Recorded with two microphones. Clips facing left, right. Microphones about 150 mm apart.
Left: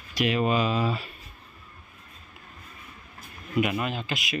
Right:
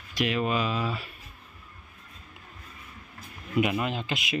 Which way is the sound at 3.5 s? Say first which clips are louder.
Even; 20° right (ahead or behind).